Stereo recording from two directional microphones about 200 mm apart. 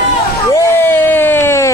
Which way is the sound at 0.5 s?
15° left (ahead or behind).